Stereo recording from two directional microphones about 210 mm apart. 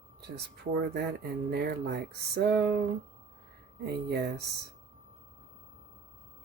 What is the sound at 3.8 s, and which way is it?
Speech, 50° right (ahead or behind).